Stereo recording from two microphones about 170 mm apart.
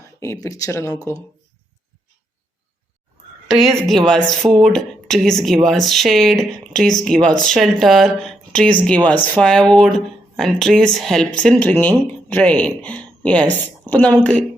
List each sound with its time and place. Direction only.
0.2 s speech: 20° left (ahead or behind)
3.5 s a woman's voice: centre (ahead or behind)